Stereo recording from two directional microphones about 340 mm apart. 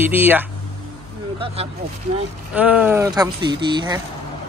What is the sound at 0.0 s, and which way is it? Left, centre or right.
Speech, centre.